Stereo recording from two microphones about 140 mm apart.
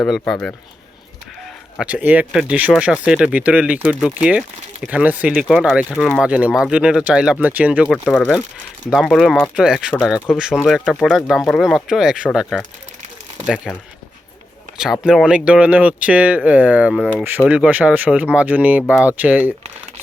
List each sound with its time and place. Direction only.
0.0 s speech: 5° left (ahead or behind)
1.8 s speech: 10° right (ahead or behind)
15.0 s speech: 5° right (ahead or behind)